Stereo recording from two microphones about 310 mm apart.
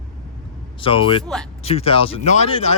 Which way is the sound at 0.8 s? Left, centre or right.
Centre.